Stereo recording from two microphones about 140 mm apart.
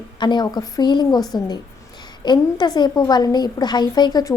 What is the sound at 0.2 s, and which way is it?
A woman's voice, 30° left (ahead or behind).